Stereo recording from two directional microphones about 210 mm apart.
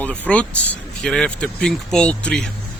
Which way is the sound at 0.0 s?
5° left (ahead or behind).